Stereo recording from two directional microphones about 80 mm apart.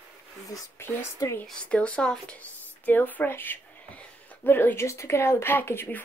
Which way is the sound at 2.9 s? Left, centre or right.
Left.